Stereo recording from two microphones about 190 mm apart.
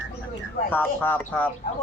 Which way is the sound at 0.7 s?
10° left (ahead or behind).